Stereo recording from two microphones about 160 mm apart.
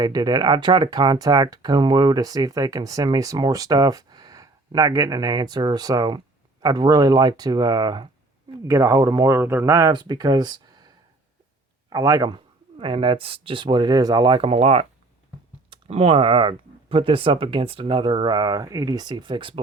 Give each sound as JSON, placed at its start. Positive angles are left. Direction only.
{"t": 0.0, "sound": "speech", "side_deg": -25}
{"t": 11.9, "sound": "speech", "side_deg": -20}
{"t": 12.8, "sound": "speech", "side_deg": -30}